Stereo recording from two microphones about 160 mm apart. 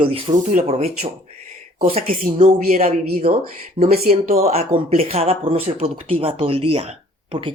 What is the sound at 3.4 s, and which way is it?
Speech, 65° right (ahead or behind).